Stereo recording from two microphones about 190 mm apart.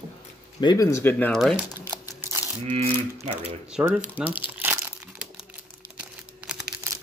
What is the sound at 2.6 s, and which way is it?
Typewriter, 35° right (ahead or behind).